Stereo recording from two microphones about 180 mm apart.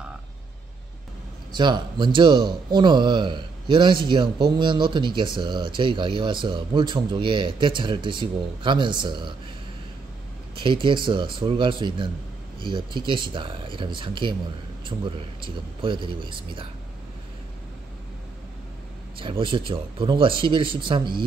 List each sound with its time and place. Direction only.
1.5 s speech: 25° right (ahead or behind)
10.6 s speech: 25° right (ahead or behind)
19.1 s speech: 30° right (ahead or behind)